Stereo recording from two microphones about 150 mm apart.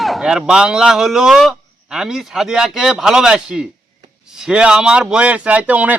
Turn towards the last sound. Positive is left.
turn(degrees=-10)  # may be behind; listen again after turning